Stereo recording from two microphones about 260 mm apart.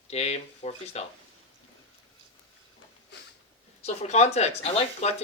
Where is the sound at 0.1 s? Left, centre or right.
Left.